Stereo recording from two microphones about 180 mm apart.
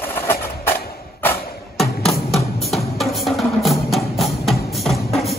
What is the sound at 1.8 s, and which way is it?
Music, centre (ahead or behind).